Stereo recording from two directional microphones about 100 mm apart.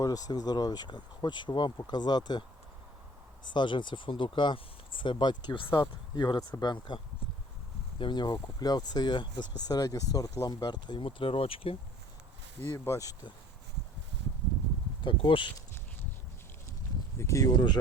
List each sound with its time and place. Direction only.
0.0 s speech: 40° left (ahead or behind)
3.4 s speech: 50° left (ahead or behind); by 11.8 s 70° left (ahead or behind)
12.6 s speech: 25° left (ahead or behind)
15.0 s speech: 55° left (ahead or behind)
17.2 s speech: 30° left (ahead or behind)